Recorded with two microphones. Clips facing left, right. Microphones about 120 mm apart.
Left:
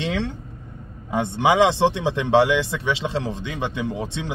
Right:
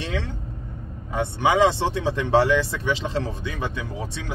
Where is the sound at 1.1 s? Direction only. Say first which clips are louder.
Left 2 dB; 20° left (ahead or behind).